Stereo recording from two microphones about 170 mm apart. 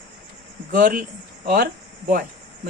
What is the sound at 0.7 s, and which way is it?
Speech, 55° right (ahead or behind).